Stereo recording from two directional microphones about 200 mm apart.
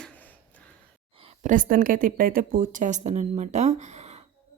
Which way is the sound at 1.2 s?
35° right (ahead or behind).